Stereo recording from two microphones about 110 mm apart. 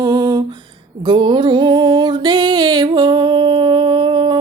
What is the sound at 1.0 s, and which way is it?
Music, 45° right (ahead or behind).